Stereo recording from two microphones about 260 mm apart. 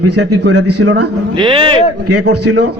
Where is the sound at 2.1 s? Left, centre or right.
Right.